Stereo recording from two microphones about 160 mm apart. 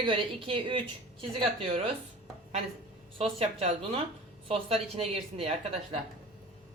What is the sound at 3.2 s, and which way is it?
A woman's voice, 40° right (ahead or behind).